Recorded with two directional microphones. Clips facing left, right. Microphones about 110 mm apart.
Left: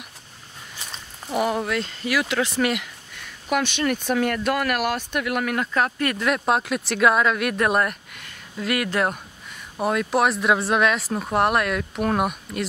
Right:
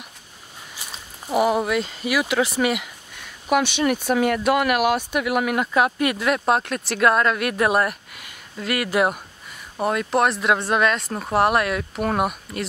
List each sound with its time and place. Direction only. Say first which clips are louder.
0.7 s speech: even; 5° right (ahead or behind)